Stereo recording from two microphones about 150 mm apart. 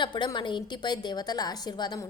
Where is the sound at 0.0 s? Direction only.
30° left (ahead or behind).